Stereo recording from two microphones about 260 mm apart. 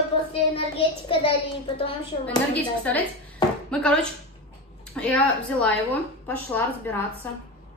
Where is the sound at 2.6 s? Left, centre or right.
Centre.